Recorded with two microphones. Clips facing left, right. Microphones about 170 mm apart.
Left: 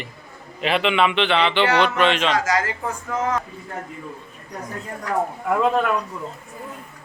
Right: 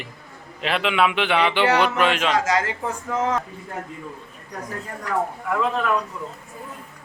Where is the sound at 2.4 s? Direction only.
25° right (ahead or behind).